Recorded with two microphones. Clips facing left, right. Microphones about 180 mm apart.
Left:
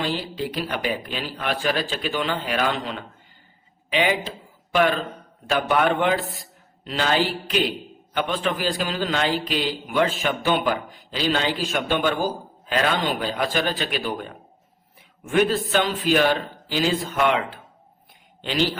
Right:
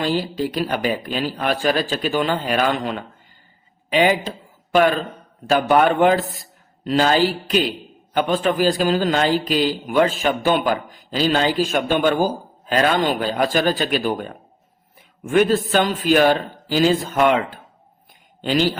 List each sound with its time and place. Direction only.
0.0 s a man's voice: 40° right (ahead or behind)